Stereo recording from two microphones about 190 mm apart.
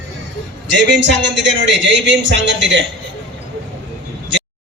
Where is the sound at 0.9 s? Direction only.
70° right (ahead or behind).